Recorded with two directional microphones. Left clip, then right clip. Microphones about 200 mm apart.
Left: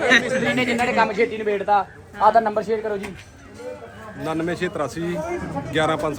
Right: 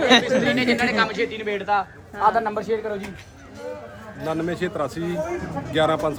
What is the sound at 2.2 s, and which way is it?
Speech, 35° left (ahead or behind).